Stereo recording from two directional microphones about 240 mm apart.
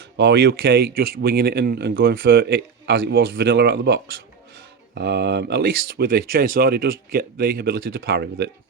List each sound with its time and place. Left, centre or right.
0.2 s speech: right